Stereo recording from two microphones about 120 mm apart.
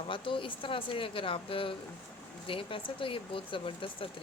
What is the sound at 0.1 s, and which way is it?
Speech, 45° left (ahead or behind).